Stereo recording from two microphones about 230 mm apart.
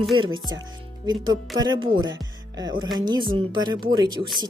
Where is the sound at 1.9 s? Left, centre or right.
Right.